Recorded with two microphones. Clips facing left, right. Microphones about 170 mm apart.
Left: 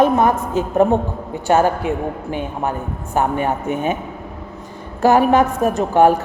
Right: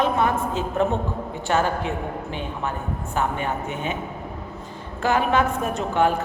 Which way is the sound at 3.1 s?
45° left (ahead or behind).